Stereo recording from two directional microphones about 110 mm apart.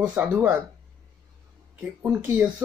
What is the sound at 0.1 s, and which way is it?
Speech, 15° right (ahead or behind).